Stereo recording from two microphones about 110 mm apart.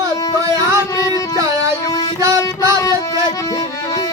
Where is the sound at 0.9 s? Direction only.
35° left (ahead or behind).